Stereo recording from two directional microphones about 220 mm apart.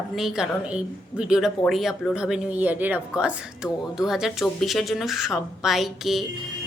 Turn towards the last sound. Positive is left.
turn(degrees=0)  # may be behind; listen again after turning